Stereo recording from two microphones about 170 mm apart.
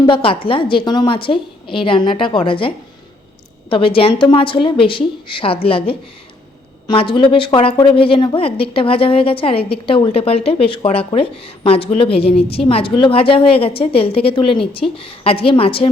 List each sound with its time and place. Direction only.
0.1 s a woman's voice: 30° left (ahead or behind)